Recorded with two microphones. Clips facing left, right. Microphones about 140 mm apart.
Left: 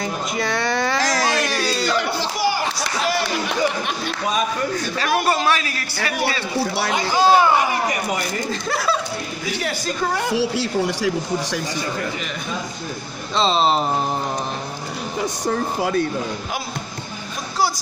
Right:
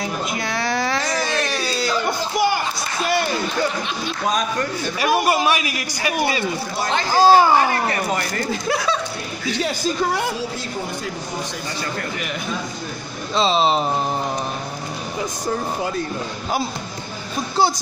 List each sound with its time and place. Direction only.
0.0 s speech: centre (ahead or behind)
1.0 s a sound: 90° left
1.4 s a sound: centre (ahead or behind)
3.4 s speech: 55° left (ahead or behind)
4.3 s speech: 5° left (ahead or behind)
4.7 s a man's voice: 10° right (ahead or behind)
7.2 s speech: 35° right (ahead or behind)
7.9 s speech: 15° left (ahead or behind)
8.5 s speech: centre (ahead or behind)
10.3 s a woman's voice: 75° left (ahead or behind)
13.3 s speech: centre (ahead or behind)
15.4 s a woman's voice: 70° left (ahead or behind)